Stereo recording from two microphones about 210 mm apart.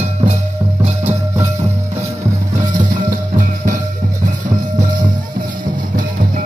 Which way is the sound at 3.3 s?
40° right (ahead or behind).